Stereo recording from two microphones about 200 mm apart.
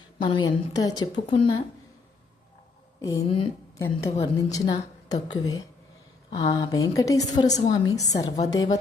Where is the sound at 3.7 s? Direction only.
15° left (ahead or behind).